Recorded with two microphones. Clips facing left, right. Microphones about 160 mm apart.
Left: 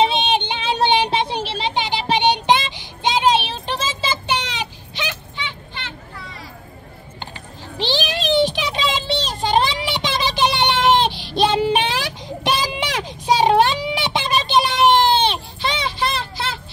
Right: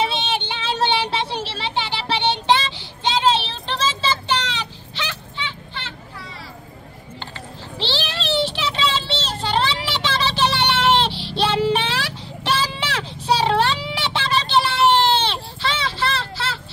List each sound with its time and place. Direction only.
0.0 s child singing: 20° left (ahead or behind)
7.7 s child singing: 15° left (ahead or behind)